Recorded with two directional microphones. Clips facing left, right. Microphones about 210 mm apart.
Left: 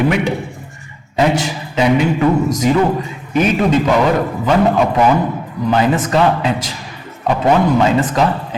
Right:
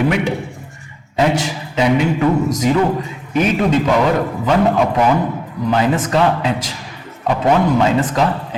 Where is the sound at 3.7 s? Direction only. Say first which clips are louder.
Left 1 dB; 15° left (ahead or behind).